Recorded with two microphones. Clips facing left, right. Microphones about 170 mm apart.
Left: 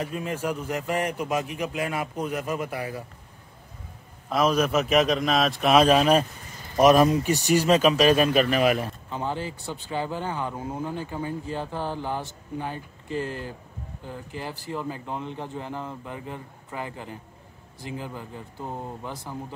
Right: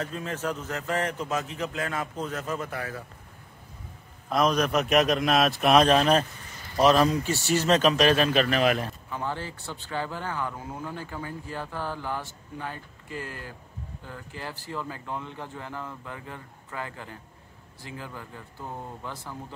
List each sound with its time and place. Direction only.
0.0 s a man's voice: 10° left (ahead or behind)
4.3 s a man's voice: 5° left (ahead or behind)
9.1 s speech: 20° left (ahead or behind)